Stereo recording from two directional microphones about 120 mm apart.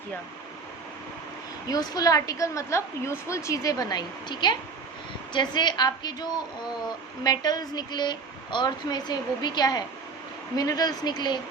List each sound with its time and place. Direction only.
1.6 s a woman's voice: 30° left (ahead or behind)